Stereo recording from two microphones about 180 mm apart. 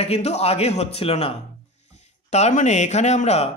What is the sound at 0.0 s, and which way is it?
Speech, 35° left (ahead or behind).